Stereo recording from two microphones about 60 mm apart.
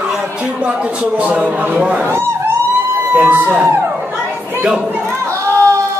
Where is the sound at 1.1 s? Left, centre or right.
Right.